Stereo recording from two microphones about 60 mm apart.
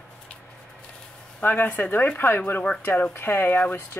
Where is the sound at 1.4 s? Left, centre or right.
Left.